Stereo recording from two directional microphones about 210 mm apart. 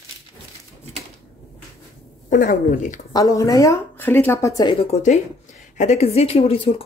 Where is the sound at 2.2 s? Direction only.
40° left (ahead or behind).